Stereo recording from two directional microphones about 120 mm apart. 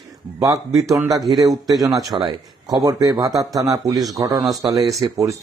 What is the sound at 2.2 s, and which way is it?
A man's voice, 40° right (ahead or behind).